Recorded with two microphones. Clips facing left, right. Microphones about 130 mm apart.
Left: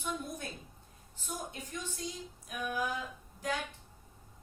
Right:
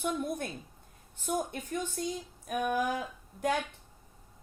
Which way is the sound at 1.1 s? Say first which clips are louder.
Right 9 dB; 55° right (ahead or behind).